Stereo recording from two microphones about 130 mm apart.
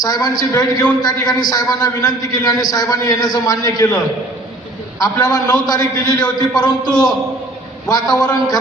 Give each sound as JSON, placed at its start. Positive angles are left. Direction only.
{"t": 0.0, "sound": "a man's voice", "side_deg": 30}
{"t": 5.2, "sound": "a man's voice", "side_deg": 30}